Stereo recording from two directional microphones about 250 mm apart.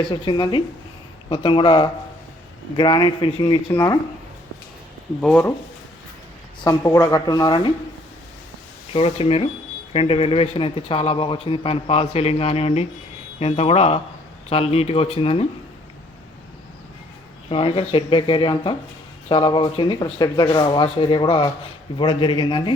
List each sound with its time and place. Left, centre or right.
0.0 s a man's voice: centre
5.2 s speech: centre
6.7 s speech: centre
8.9 s a man's voice: left
17.5 s a man's voice: left